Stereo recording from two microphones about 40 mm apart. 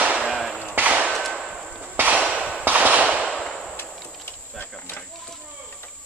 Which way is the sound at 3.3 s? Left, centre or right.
Centre.